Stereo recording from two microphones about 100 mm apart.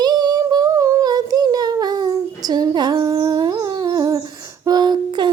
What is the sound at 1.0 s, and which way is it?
Child singing, 45° right (ahead or behind).